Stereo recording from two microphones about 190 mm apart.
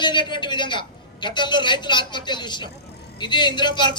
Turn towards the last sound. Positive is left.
turn(degrees=25)  # may be behind; listen again after turning